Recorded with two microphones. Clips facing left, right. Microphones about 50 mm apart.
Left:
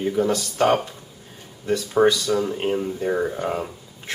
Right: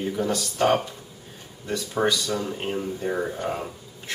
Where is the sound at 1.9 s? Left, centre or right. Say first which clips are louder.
Left 6 dB; centre.